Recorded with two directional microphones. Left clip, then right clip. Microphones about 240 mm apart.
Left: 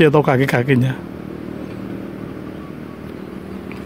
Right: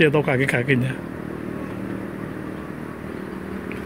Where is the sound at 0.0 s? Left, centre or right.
Centre.